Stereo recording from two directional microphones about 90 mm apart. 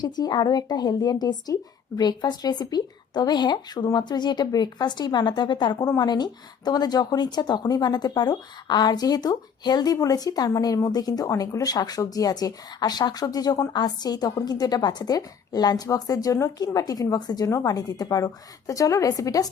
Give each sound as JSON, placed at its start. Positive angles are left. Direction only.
{"t": 0.0, "sound": "a woman's voice", "side_deg": 50}